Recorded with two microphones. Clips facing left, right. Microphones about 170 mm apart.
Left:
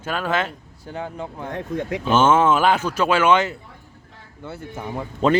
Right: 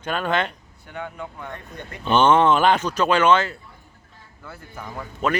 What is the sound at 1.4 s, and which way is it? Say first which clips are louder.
Speech: left 10 dB; 90° left.